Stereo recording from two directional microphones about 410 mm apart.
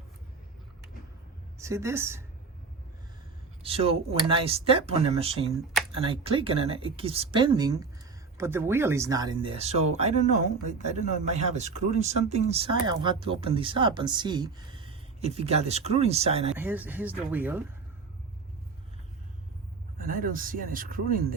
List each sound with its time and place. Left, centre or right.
1.5 s speech: centre
3.6 s speech: centre
20.0 s speech: centre